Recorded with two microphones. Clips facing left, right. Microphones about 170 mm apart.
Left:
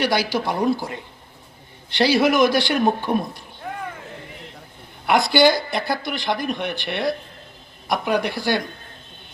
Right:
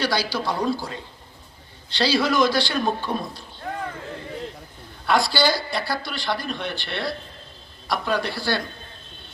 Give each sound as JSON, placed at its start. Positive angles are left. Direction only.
{"t": 0.0, "sound": "speech", "side_deg": 20}
{"t": 5.0, "sound": "speech", "side_deg": 20}